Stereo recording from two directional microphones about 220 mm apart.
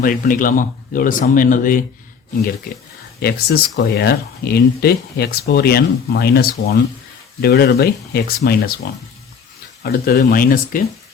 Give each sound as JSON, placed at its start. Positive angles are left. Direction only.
{"t": 0.0, "sound": "speech", "side_deg": 40}
{"t": 3.2, "sound": "speech", "side_deg": 45}